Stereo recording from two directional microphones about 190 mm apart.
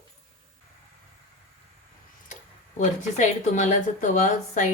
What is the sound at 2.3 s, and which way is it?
Speech, 40° left (ahead or behind).